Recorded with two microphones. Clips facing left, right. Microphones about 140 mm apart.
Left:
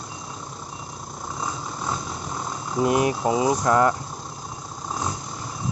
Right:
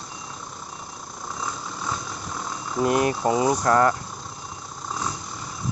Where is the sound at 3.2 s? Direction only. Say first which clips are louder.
Even; 5° left (ahead or behind).